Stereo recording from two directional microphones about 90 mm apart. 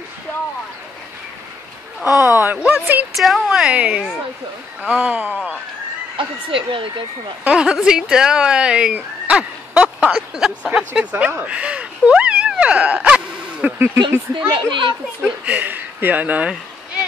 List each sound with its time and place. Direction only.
2.0 s speech: 40° left (ahead or behind)
2.4 s speech: 20° right (ahead or behind)
3.2 s speech: centre (ahead or behind)
6.1 s speech: 70° right (ahead or behind)
7.4 s speech: 10° right (ahead or behind)
11.0 s a sound: 15° right (ahead or behind)
14.5 s a child's voice: 65° right (ahead or behind)
15.2 s speech: 15° right (ahead or behind)